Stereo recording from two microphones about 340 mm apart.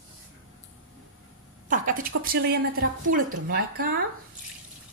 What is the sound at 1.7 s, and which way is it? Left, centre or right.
A woman's voice, right.